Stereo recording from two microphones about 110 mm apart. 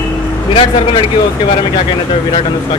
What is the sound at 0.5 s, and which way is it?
Speech, 55° left (ahead or behind).